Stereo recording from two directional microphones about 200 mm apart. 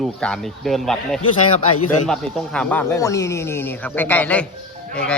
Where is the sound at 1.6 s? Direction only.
90° left.